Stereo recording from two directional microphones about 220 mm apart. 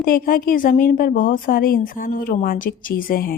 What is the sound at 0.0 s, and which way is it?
Speech, 40° left (ahead or behind).